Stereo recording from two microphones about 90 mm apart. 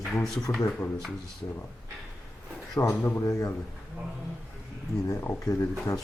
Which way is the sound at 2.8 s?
35° left (ahead or behind).